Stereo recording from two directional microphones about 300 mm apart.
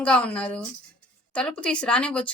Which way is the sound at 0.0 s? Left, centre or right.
Centre.